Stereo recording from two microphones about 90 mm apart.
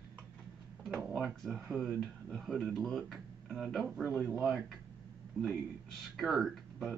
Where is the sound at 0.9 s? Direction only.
5° right (ahead or behind).